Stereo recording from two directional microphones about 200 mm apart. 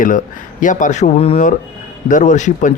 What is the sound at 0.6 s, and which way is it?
Speech, 40° left (ahead or behind).